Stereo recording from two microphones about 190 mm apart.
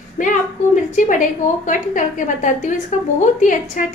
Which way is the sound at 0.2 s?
40° left (ahead or behind).